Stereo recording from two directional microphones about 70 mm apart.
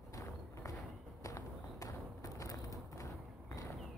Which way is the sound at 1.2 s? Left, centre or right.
Left.